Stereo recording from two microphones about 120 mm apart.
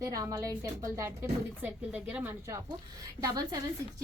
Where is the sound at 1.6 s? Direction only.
10° right (ahead or behind).